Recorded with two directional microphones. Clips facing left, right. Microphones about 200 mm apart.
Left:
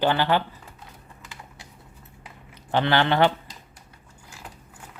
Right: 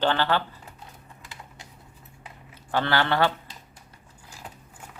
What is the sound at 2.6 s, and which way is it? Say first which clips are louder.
Speech: left 3 dB; 20° left (ahead or behind).